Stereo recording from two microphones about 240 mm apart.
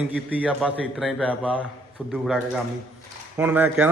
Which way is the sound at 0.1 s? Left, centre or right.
Centre.